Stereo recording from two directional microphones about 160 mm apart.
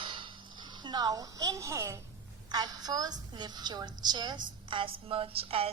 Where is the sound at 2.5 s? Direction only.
25° right (ahead or behind).